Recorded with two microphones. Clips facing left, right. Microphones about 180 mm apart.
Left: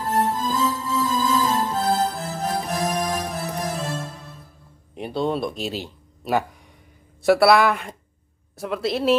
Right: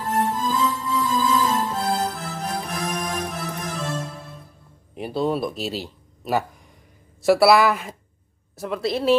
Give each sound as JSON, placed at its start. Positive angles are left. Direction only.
{"t": 0.1, "sound": "music", "side_deg": 35}
{"t": 4.9, "sound": "speech", "side_deg": -5}